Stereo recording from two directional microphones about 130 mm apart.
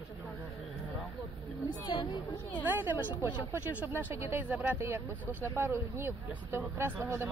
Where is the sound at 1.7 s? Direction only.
35° left (ahead or behind).